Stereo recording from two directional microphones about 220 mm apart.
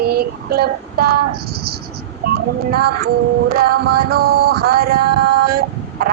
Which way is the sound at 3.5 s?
45° right (ahead or behind).